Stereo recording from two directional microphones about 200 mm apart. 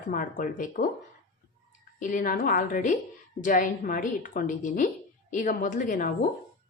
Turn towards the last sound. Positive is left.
turn(degrees=40)  # may be behind; listen again after turning